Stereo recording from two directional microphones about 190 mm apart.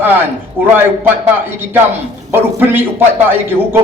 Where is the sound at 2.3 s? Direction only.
10° right (ahead or behind).